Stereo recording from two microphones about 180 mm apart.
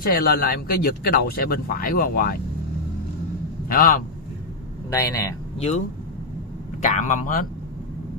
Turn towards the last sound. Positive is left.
turn(degrees=45)  # may be behind; listen again after turning